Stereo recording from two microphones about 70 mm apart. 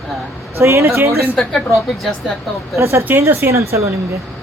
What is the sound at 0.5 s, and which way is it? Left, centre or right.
Speech, right.